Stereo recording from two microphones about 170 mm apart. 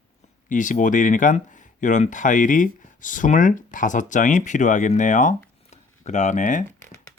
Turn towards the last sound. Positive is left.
turn(degrees=45)  # may be behind; listen again after turning